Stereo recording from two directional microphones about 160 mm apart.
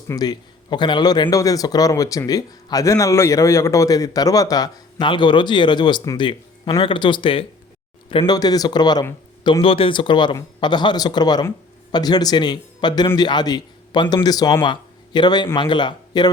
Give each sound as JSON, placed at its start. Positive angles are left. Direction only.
{"t": 0.1, "sound": "a man's voice", "side_deg": 25}